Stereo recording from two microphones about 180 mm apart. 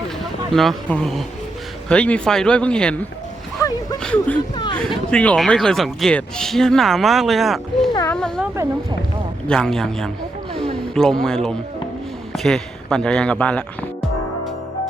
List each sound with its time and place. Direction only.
0.5 s speech: centre (ahead or behind)
4.0 s speech: 5° left (ahead or behind)
4.5 s a sound: 25° left (ahead or behind)
5.1 s speech: 5° left (ahead or behind)
8.0 s a sound: 5° left (ahead or behind)
9.5 s speech: 5° left (ahead or behind)